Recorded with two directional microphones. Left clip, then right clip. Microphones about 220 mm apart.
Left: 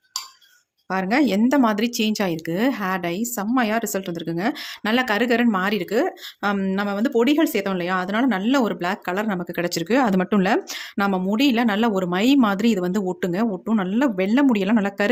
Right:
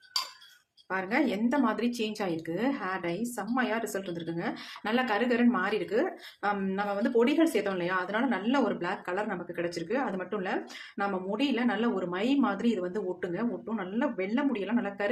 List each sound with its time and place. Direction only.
0.9 s a woman's voice: 45° left (ahead or behind)